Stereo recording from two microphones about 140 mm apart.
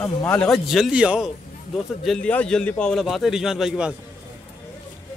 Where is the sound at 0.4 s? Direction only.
Centre (ahead or behind).